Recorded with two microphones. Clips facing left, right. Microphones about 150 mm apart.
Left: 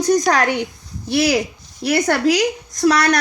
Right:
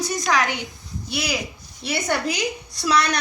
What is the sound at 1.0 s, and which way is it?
A woman's voice, 60° left (ahead or behind).